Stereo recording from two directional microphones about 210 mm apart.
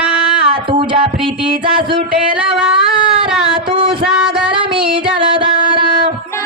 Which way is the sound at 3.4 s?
25° right (ahead or behind).